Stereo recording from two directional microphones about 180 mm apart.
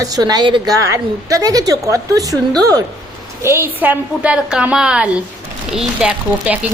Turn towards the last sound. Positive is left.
turn(degrees=-5)  # may be behind; listen again after turning